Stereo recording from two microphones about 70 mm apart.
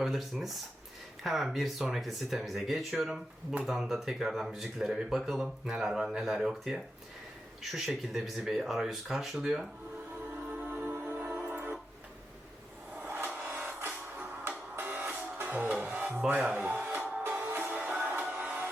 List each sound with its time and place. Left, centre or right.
0.0 s speech: centre
10.3 s music: right
13.0 s a sound: right
13.7 s music: right
17.7 s music: centre
18.2 s music: right